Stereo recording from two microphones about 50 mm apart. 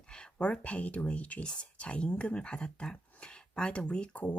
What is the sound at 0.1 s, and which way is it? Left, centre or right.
Speech, centre.